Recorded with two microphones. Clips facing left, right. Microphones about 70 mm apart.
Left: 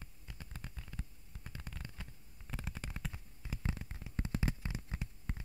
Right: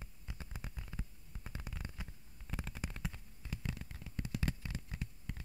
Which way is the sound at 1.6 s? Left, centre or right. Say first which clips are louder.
Right 1 dB; centre.